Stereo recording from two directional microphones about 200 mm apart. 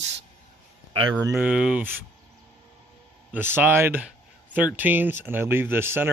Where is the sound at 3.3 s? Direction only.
10° right (ahead or behind).